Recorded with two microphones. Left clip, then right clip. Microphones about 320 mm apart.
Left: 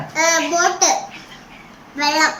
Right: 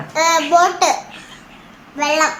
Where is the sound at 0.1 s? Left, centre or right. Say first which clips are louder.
Right 3 dB; centre.